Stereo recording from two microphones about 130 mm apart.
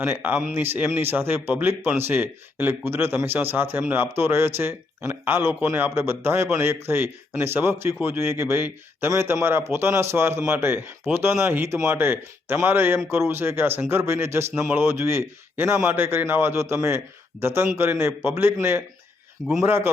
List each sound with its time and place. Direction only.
0.0 s a man's voice: 15° right (ahead or behind)
19.6 s a man's voice: 15° right (ahead or behind)